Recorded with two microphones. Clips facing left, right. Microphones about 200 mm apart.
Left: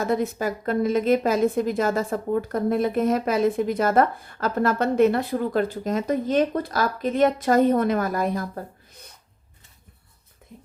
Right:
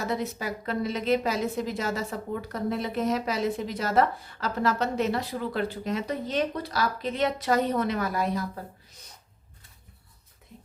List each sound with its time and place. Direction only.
0.0 s a woman's voice: 50° left (ahead or behind)